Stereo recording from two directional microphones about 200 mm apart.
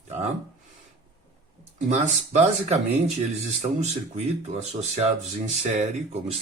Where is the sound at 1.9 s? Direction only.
35° right (ahead or behind).